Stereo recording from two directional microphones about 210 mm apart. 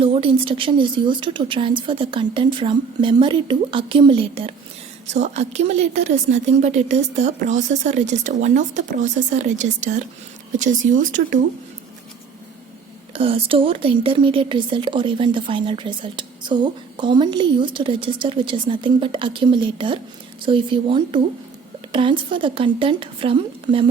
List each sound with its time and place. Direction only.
0.0 s speech: 25° right (ahead or behind)
13.1 s speech: 25° right (ahead or behind)